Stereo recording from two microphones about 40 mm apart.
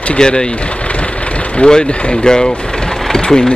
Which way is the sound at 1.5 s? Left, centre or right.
Left.